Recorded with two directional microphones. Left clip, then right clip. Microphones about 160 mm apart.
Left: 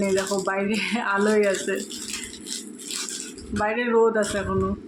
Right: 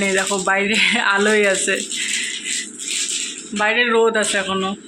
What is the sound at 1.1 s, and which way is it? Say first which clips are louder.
Speech: right 5 dB; 15° right (ahead or behind).